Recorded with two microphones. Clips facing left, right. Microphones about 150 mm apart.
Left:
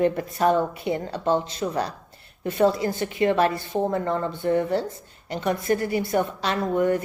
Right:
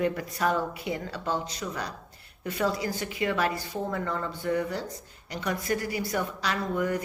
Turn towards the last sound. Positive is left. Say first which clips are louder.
# left 6 dB
turn(degrees=25)  # may be behind; listen again after turning